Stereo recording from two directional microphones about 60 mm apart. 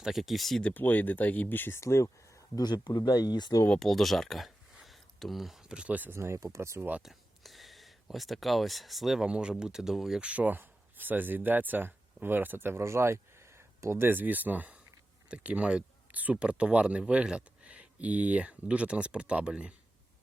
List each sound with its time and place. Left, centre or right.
0.0 s speech: centre
0.6 s speech: left
1.8 s speech: left
3.1 s speech: left
3.8 s speech: centre
5.6 s speech: centre
5.9 s speech: right
6.1 s speech: right
7.0 s speech: centre
9.2 s speech: centre
10.2 s speech: right